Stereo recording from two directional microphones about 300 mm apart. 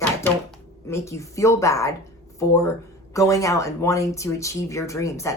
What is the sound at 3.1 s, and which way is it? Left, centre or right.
Speech, centre.